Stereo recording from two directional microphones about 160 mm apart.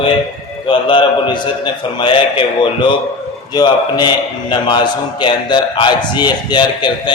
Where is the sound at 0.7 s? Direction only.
30° left (ahead or behind).